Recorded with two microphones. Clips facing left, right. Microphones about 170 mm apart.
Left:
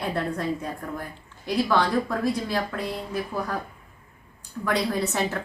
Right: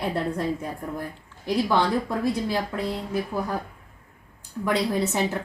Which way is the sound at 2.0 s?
25° right (ahead or behind).